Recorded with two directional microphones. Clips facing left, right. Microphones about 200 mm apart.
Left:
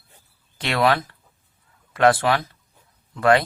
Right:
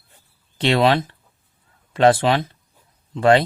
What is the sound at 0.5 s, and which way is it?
Speech, 25° right (ahead or behind).